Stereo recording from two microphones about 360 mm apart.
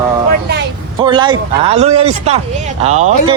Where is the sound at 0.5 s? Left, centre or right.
Right.